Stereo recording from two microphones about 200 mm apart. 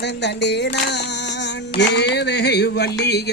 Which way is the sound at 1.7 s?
60° left (ahead or behind).